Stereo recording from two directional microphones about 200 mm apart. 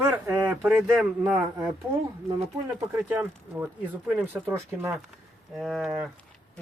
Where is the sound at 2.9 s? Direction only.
10° right (ahead or behind).